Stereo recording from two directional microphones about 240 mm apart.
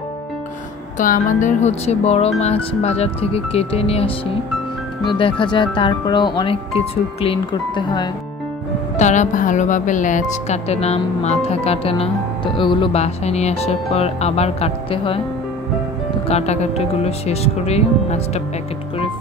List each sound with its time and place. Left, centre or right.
0.9 s speech: left
8.9 s speech: left
16.3 s speech: left